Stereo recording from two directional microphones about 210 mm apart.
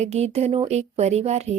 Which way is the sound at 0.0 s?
30° right (ahead or behind).